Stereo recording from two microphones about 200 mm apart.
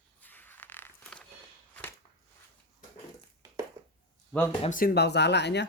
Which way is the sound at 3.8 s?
15° right (ahead or behind).